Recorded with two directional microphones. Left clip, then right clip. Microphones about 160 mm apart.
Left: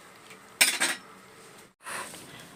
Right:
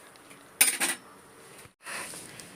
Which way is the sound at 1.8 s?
5° left (ahead or behind).